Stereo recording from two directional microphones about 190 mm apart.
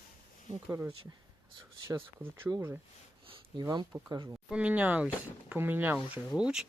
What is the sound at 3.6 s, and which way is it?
Speech, 20° right (ahead or behind).